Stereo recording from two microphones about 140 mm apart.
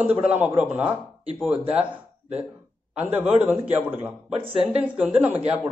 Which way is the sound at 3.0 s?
10° right (ahead or behind).